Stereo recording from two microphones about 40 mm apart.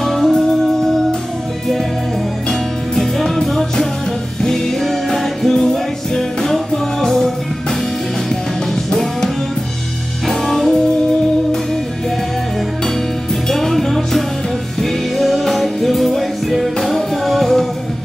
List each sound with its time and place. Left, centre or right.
0.0 s music: centre
3.0 s music: centre
10.2 s music: centre
13.5 s music: centre